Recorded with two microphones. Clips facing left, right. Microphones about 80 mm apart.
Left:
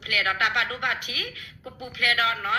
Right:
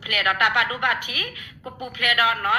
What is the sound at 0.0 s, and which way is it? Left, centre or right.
A woman's voice, right.